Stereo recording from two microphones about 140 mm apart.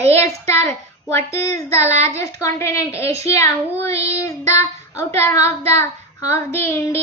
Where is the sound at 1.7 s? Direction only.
50° right (ahead or behind).